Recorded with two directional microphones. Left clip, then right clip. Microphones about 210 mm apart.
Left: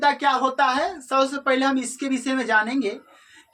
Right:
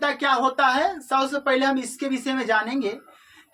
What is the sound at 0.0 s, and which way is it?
Speech, 25° right (ahead or behind).